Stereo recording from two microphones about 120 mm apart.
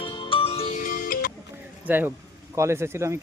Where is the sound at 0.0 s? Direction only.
45° left (ahead or behind).